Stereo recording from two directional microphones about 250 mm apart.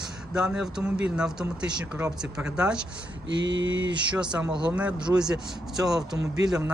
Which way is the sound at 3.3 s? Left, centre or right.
Right.